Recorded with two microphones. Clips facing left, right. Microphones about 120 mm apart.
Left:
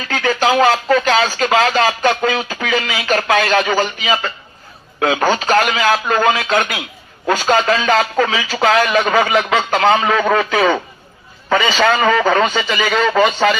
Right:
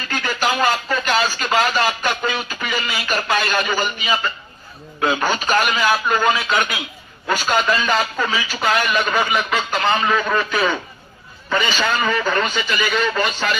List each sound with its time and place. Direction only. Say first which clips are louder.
0.1 s speech: left 6 dB; 90° left
4.9 s speech: left 4 dB; 70° left (ahead or behind)
11.4 s speech: left 6 dB; 85° left